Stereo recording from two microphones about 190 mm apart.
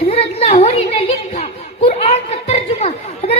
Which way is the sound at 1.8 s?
30° left (ahead or behind).